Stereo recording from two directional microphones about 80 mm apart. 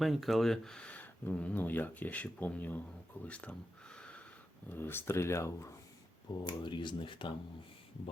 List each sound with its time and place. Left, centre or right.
0.0 s speech: centre; by 2.8 s left
3.2 s a sound: centre
4.7 s speech: left
6.4 s speech: left